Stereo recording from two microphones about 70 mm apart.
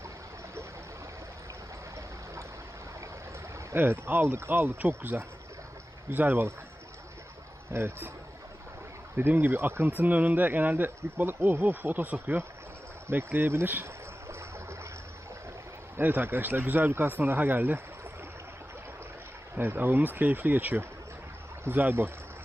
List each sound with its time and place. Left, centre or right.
3.8 s speech: right
7.7 s speech: right
9.1 s speech: right
14.3 s a sound: right
16.0 s speech: right
19.5 s speech: right